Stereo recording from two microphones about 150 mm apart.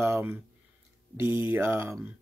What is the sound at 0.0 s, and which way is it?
Speech, 15° right (ahead or behind).